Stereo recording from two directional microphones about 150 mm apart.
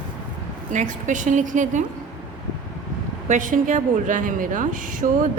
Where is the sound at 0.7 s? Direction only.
55° right (ahead or behind).